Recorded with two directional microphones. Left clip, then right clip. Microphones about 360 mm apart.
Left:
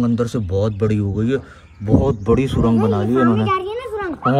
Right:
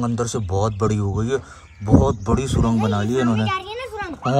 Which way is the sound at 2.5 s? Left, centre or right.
Right.